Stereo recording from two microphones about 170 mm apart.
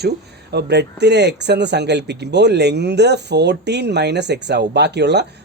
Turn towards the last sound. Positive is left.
turn(degrees=-80)